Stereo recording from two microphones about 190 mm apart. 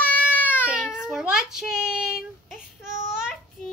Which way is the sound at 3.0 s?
5° right (ahead or behind).